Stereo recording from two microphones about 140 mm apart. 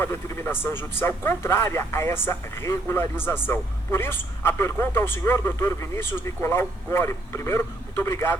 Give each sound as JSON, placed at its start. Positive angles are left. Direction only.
{"t": 0.0, "sound": "a man's voice", "side_deg": 15}